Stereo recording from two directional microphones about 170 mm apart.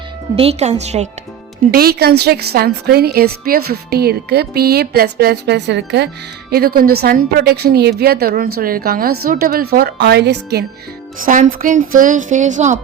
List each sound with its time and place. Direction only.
0.3 s speech: 35° right (ahead or behind)
1.7 s a woman's voice: 65° right (ahead or behind); by 6.1 s 85° right
6.5 s a woman's voice: 65° right (ahead or behind); by 10.7 s 80° right
11.2 s a woman's voice: 50° right (ahead or behind)